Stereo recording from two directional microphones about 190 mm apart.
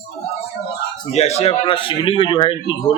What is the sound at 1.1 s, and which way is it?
Speech, 35° left (ahead or behind).